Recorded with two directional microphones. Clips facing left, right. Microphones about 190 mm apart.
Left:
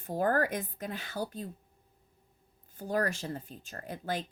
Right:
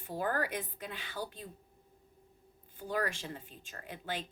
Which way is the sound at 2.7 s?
45° left (ahead or behind).